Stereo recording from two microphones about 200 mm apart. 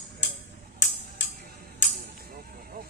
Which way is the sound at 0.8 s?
65° left (ahead or behind).